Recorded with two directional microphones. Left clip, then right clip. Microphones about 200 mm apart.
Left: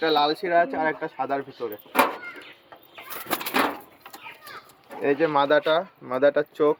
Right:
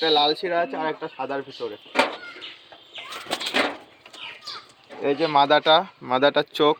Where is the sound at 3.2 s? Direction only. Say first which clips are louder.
Even; 60° left (ahead or behind).